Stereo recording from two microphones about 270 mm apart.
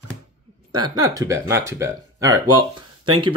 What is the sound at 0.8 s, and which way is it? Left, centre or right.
Speech, centre.